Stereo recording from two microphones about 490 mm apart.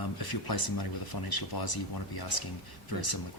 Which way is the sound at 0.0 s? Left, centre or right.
Left.